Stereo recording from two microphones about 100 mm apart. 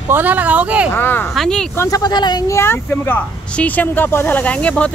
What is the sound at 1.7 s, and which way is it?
Speech, 35° left (ahead or behind).